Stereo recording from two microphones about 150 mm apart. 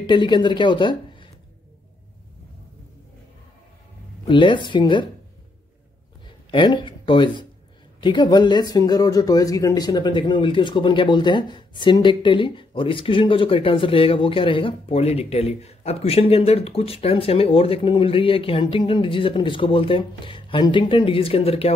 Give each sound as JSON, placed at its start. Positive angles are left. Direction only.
{"t": 0.0, "sound": "speech", "side_deg": 30}
{"t": 4.3, "sound": "speech", "side_deg": 30}
{"t": 6.2, "sound": "speech", "side_deg": 35}